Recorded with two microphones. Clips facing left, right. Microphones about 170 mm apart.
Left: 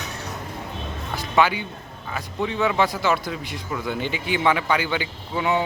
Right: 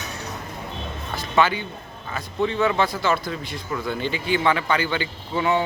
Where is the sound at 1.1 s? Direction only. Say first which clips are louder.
Even; 15° left (ahead or behind).